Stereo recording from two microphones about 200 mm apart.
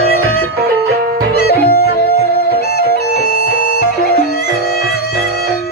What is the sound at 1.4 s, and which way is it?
Music, 50° left (ahead or behind).